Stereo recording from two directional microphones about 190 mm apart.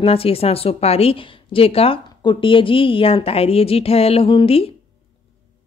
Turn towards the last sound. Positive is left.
turn(degrees=30)  # may be behind; listen again after turning